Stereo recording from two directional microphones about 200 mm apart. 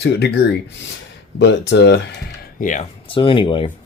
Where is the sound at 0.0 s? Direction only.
55° left (ahead or behind).